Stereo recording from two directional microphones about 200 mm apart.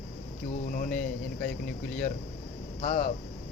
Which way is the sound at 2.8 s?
40° left (ahead or behind).